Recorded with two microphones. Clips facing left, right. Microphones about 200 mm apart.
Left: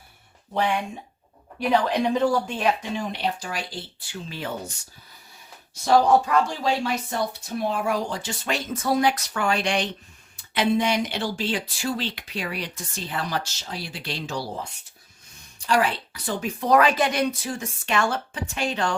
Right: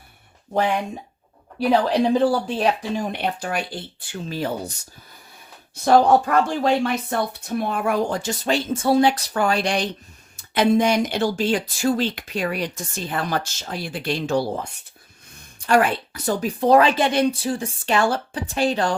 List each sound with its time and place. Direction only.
0.5 s speech: 45° right (ahead or behind)
1.5 s a woman's voice: 35° right (ahead or behind)
3.1 s speech: 55° right (ahead or behind); by 4.7 s 40° right (ahead or behind)
5.7 s speech: 55° right (ahead or behind)
8.4 s a woman's voice: 30° right (ahead or behind); by 14.4 s 50° right (ahead or behind)
15.6 s a woman's voice: 50° right (ahead or behind); by 18.9 s 35° right (ahead or behind)